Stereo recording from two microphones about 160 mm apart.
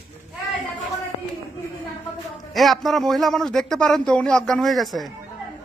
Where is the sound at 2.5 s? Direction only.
Centre (ahead or behind).